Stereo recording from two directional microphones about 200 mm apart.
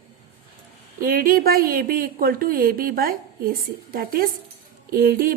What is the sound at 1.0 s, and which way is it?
Speech, 45° right (ahead or behind).